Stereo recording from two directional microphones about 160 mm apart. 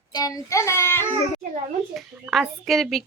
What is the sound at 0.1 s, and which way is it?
Speech, 25° left (ahead or behind).